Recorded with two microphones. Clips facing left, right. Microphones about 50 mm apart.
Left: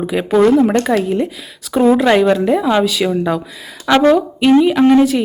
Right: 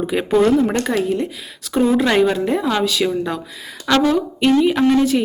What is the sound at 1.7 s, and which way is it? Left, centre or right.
A woman's voice, centre.